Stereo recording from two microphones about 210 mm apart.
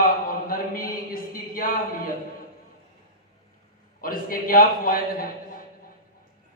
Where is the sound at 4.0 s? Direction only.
45° left (ahead or behind).